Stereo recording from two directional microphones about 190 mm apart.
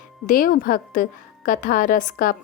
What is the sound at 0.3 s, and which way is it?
A woman's voice, 45° left (ahead or behind).